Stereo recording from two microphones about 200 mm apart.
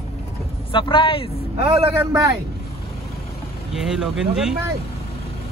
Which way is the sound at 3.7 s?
Centre (ahead or behind).